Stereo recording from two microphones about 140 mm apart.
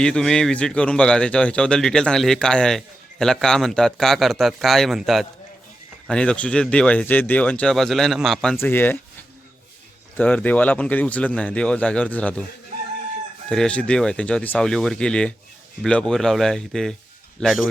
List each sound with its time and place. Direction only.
0.0 s a man's voice: 5° left (ahead or behind)
8.5 s speech: 15° left (ahead or behind)
10.2 s speech: 10° left (ahead or behind)
13.5 s a man's voice: 5° left (ahead or behind)